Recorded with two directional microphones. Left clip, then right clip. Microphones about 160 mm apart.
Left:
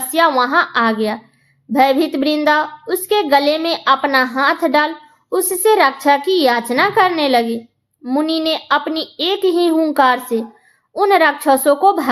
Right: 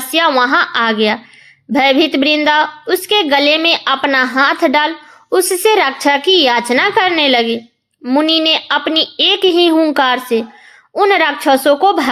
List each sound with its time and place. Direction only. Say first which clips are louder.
0.1 s a woman's voice: right 2 dB; 25° right (ahead or behind)